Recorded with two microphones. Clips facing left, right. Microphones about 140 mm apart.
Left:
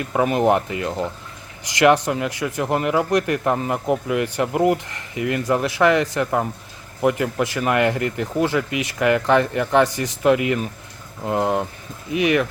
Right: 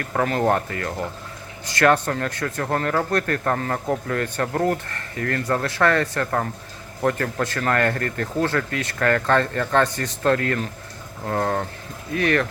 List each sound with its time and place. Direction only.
0.0 s speech: 15° left (ahead or behind)